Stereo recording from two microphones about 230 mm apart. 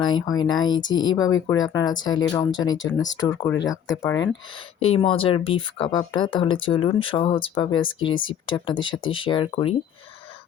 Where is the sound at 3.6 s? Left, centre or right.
Left.